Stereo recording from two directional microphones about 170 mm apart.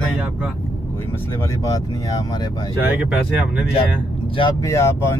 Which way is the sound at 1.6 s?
20° left (ahead or behind).